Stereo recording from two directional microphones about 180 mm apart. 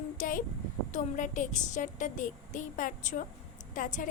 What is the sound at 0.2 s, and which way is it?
A woman's voice, 50° left (ahead or behind).